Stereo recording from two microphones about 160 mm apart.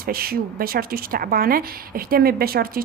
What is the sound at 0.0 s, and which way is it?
A woman's voice, 65° right (ahead or behind).